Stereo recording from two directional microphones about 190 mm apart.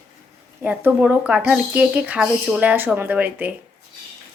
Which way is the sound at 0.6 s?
10° right (ahead or behind).